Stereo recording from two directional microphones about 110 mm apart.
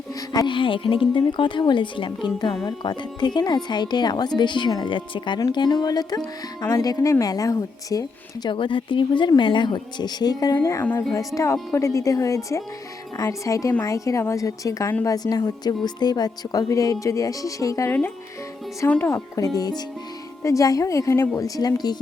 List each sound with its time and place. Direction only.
0.3 s speech: 45° left (ahead or behind)
8.5 s a woman's voice: 50° left (ahead or behind)